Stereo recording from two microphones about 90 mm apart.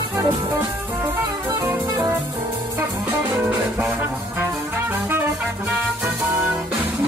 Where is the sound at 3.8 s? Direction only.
20° right (ahead or behind).